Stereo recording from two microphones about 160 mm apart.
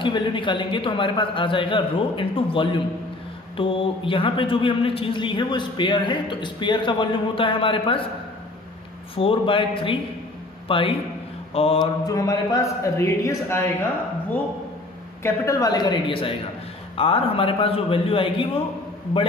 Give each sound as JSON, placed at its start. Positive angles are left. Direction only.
{"t": 0.0, "sound": "a man's voice", "side_deg": 30}
{"t": 9.1, "sound": "a man's voice", "side_deg": 35}
{"t": 12.1, "sound": "a man's voice", "side_deg": 20}
{"t": 15.2, "sound": "a man's voice", "side_deg": 20}